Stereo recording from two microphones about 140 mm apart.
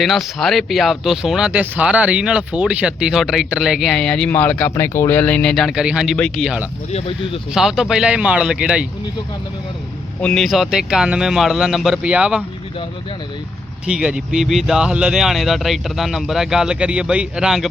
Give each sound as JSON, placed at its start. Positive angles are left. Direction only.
{"t": 0.0, "sound": "speech", "side_deg": 0}
{"t": 6.9, "sound": "speech", "side_deg": 40}
{"t": 7.5, "sound": "speech", "side_deg": -5}
{"t": 10.2, "sound": "speech", "side_deg": 5}
{"t": 13.8, "sound": "speech", "side_deg": -5}